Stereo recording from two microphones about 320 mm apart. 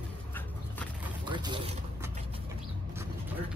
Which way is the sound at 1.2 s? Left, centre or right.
Centre.